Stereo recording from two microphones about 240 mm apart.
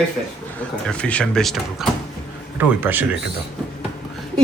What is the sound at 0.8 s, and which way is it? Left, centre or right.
Speech, centre.